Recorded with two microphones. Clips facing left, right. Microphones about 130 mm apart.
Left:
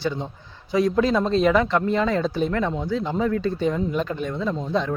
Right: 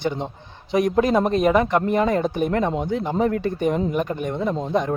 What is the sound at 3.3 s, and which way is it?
Speech, 55° right (ahead or behind).